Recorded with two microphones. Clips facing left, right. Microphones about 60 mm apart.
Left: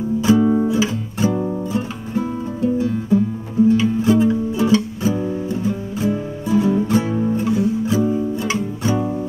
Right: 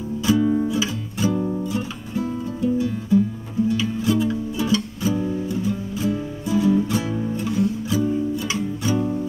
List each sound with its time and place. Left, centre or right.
0.2 s music: left
7.4 s guitar: centre
7.8 s music: left
8.9 s music: centre